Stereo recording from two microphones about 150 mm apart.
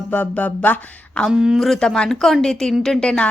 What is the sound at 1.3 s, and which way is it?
A woman's voice, 5° right (ahead or behind).